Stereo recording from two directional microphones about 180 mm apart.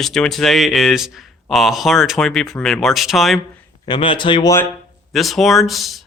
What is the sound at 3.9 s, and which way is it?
Speech, 30° left (ahead or behind).